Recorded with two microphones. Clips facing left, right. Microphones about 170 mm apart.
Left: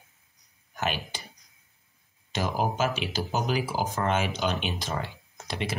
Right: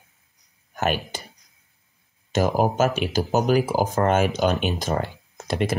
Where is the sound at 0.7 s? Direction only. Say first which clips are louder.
Right 7 dB; 50° right (ahead or behind).